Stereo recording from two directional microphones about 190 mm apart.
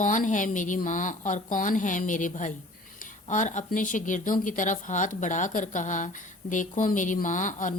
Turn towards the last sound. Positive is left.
turn(degrees=40)  # may be behind; listen again after turning